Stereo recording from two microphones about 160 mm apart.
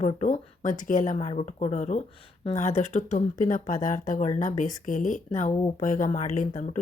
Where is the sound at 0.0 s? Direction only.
50° left (ahead or behind).